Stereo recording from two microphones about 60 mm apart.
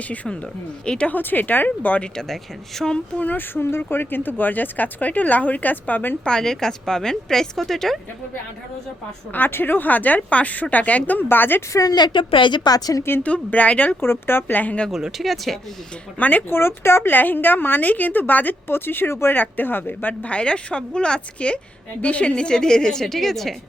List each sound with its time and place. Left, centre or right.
0.9 s a woman's voice: centre
1.1 s a woman's voice: left
2.3 s a woman's voice: centre
3.2 s a woman's voice: left
6.2 s a woman's voice: centre
9.3 s speech: left
11.7 s speech: left
13.0 s a woman's voice: left
13.2 s speech: left
14.0 s a woman's voice: left
14.8 s speech: centre
16.1 s speech: left
16.6 s a woman's voice: left; by 23.6 s centre